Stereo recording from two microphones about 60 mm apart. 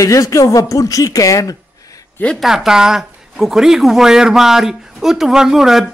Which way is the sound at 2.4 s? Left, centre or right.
Centre.